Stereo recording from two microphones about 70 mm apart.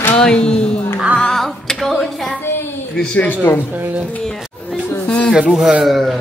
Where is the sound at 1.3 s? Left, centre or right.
Centre.